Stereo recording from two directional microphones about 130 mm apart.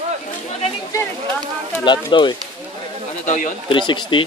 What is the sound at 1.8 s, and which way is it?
Speech, 35° left (ahead or behind).